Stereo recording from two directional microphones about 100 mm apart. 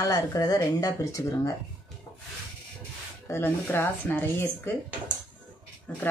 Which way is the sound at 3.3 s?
20° left (ahead or behind).